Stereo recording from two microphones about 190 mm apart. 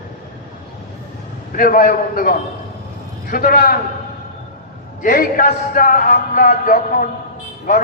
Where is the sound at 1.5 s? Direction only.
50° left (ahead or behind).